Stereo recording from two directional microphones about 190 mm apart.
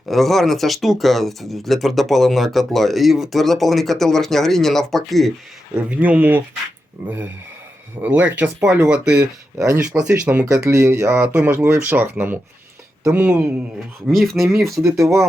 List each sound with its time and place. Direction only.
0.1 s speech: centre (ahead or behind)
8.0 s speech: 10° right (ahead or behind)
14.8 s speech: 15° right (ahead or behind)